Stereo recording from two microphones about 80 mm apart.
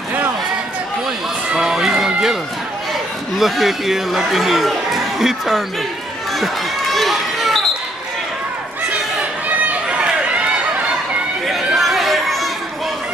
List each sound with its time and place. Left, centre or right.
1.6 s music: centre
3.3 s speech: centre
6.3 s run: centre
9.7 s run: centre
11.4 s chatter: centre